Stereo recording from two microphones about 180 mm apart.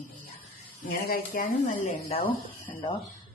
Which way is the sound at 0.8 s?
50° left (ahead or behind).